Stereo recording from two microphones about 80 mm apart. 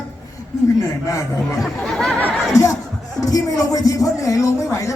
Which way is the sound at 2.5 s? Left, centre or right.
Left.